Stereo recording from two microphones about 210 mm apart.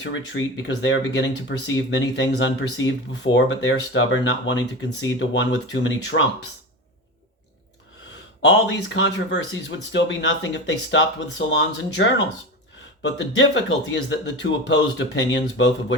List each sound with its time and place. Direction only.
0.0 s speech: 60° left (ahead or behind)
8.4 s speech: 60° left (ahead or behind)